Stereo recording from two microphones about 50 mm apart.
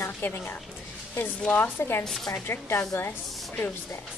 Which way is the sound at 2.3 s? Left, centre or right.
Left.